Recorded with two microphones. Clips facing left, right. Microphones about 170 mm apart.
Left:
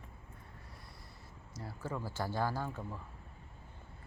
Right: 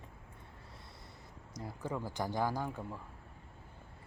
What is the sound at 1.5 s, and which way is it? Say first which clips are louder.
Speech: right 2 dB; 15° right (ahead or behind).